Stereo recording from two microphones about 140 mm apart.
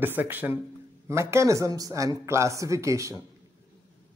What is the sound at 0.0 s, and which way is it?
A man's voice, 15° right (ahead or behind).